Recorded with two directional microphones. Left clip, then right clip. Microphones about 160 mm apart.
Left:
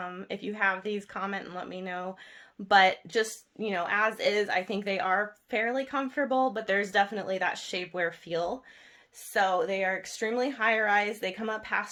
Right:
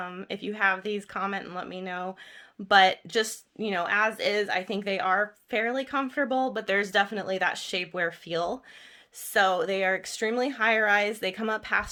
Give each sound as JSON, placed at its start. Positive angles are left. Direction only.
{"t": 0.0, "sound": "speech", "side_deg": -15}